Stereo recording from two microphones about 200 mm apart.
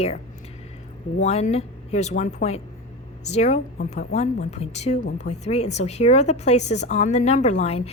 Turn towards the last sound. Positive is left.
turn(degrees=30)  # may be behind; listen again after turning